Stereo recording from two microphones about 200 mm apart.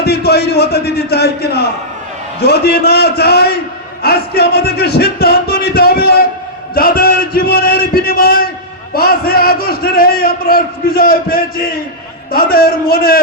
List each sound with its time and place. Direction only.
0.0 s a man's voice: 55° left (ahead or behind)